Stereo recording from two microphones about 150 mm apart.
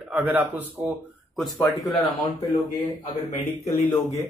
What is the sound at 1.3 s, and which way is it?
Speech, centre (ahead or behind).